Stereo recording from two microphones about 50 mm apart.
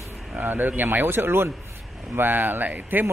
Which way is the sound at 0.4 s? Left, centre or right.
Right.